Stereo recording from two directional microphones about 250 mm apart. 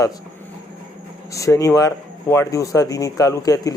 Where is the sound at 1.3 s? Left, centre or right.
Centre.